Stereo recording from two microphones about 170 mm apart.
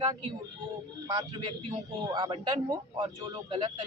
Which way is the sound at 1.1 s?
20° right (ahead or behind).